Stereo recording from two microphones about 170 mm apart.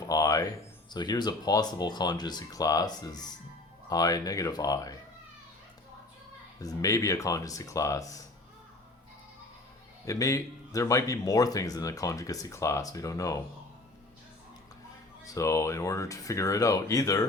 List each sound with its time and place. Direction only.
0.0 s a sound: 20° left (ahead or behind)
0.9 s speech: 25° left (ahead or behind)
6.6 s speech: 20° left (ahead or behind)
10.1 s speech: 20° left (ahead or behind)
15.2 s speech: 20° left (ahead or behind)